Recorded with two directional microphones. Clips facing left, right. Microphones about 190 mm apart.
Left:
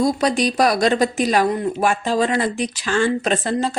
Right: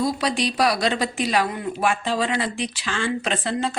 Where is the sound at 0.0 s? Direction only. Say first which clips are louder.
Left 5 dB; 45° left (ahead or behind).